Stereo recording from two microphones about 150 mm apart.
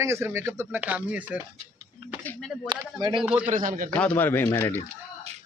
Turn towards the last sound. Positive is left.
turn(degrees=15)  # may be behind; listen again after turning